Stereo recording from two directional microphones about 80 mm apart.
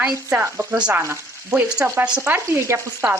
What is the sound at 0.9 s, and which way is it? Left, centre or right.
Stir, right.